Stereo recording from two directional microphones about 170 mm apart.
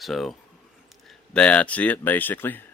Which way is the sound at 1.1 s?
5° left (ahead or behind).